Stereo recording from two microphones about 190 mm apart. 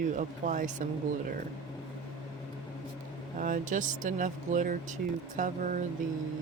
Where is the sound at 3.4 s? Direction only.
45° right (ahead or behind).